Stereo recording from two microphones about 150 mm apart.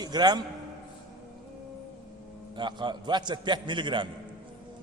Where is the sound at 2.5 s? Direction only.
30° right (ahead or behind).